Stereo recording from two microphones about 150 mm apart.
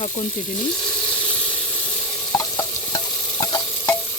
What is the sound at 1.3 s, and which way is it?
Hiss, 10° left (ahead or behind).